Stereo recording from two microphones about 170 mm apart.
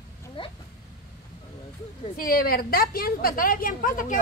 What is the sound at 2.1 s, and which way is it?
A woman's voice, 60° left (ahead or behind).